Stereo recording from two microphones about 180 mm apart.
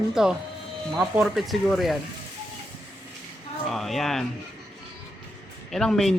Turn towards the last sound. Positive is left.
turn(degrees=0)  # may be behind; listen again after turning